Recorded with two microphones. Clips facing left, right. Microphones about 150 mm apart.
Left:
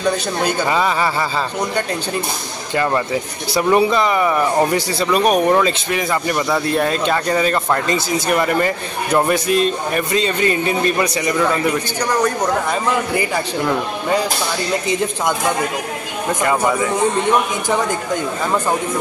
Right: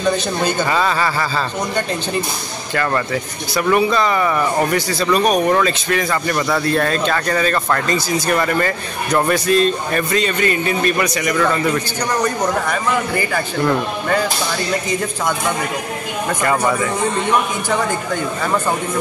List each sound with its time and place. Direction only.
0.4 s speech: 10° left (ahead or behind)
2.7 s speech: 20° left (ahead or behind)
11.4 s speech: 10° left (ahead or behind)
16.4 s speech: 10° left (ahead or behind)